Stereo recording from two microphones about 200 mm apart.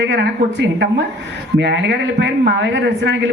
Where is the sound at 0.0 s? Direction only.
60° right (ahead or behind).